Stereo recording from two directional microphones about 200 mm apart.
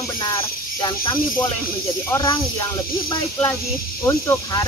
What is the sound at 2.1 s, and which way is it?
Speech, 20° left (ahead or behind).